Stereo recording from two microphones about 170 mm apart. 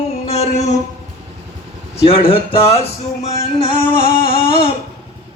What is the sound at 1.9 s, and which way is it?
A man's voice, 35° left (ahead or behind).